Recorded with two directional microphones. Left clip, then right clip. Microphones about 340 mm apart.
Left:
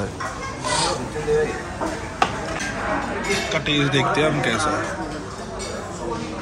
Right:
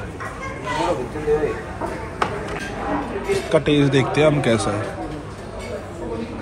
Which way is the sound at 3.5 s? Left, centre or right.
Centre.